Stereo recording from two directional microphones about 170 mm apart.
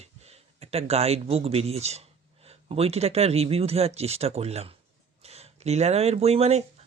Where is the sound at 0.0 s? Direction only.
40° right (ahead or behind).